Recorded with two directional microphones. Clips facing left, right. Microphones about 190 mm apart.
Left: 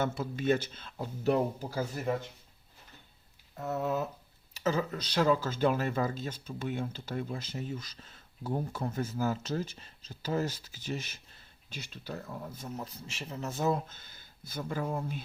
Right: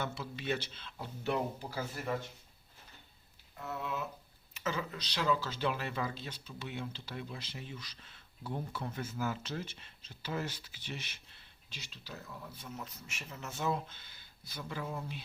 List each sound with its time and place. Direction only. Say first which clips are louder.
0.0 s speech: left 8 dB; 50° left (ahead or behind)
3.6 s speech: left 7 dB; 45° left (ahead or behind)